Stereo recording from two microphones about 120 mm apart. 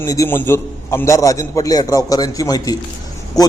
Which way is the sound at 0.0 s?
25° left (ahead or behind).